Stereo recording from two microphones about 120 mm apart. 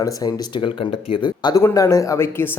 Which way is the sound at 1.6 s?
25° left (ahead or behind).